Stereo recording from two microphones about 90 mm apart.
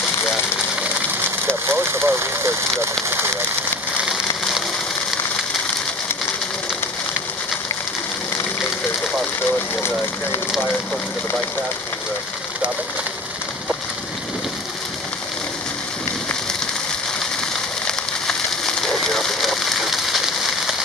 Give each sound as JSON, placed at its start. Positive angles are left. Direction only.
{"t": 1.7, "sound": "speech", "side_deg": -25}
{"t": 4.0, "sound": "a sound", "side_deg": 0}
{"t": 18.8, "sound": "rain on surface", "side_deg": 5}